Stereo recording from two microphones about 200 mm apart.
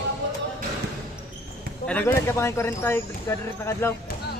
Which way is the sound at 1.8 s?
10° left (ahead or behind).